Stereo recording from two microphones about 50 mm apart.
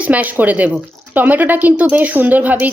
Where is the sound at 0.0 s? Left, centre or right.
Right.